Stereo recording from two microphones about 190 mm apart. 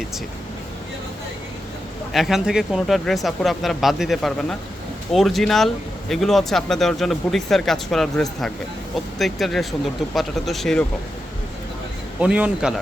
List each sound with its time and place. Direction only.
2.1 s speech: centre (ahead or behind)
12.2 s speech: 5° right (ahead or behind)